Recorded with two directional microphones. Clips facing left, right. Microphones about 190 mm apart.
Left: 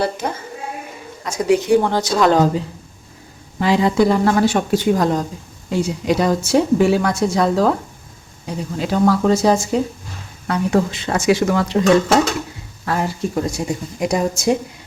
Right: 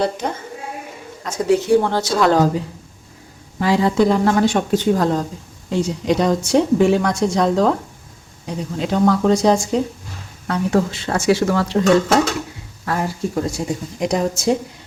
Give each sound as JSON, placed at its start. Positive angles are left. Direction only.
{"t": 0.0, "sound": "speech", "side_deg": 5}